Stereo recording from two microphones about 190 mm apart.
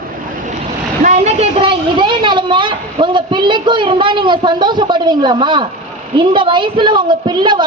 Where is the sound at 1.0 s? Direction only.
40° right (ahead or behind).